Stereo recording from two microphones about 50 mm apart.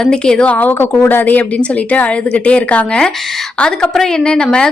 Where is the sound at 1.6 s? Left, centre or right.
Left.